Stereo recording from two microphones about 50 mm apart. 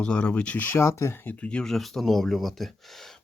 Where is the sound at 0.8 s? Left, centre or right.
Left.